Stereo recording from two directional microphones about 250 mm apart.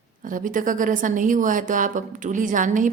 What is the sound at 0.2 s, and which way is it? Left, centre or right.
Speech, right.